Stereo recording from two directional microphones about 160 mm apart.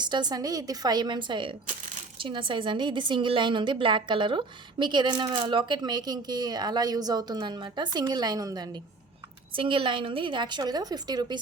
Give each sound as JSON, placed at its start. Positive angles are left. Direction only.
{"t": 0.0, "sound": "a woman's voice", "side_deg": -25}